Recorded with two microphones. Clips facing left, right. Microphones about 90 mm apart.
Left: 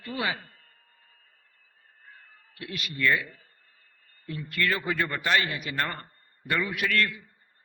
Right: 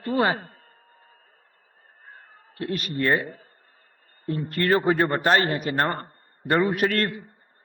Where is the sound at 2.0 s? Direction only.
40° right (ahead or behind).